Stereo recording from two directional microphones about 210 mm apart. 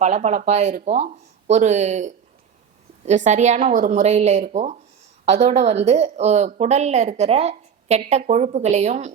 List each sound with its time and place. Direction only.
0.0 s a woman's voice: 35° right (ahead or behind)